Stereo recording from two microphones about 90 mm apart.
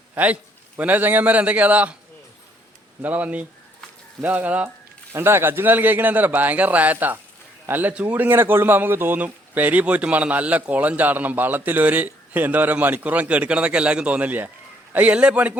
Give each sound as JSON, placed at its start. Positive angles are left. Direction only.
{"t": 0.1, "sound": "a man's voice", "side_deg": -20}
{"t": 3.0, "sound": "a man's voice", "side_deg": -20}